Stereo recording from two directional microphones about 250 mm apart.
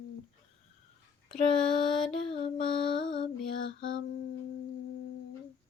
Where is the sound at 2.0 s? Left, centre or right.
Left.